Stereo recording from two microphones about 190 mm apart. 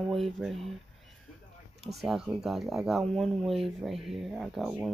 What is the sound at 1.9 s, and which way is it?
Speech, centre (ahead or behind).